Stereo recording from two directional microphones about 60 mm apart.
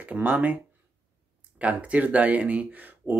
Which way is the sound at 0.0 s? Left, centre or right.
Right.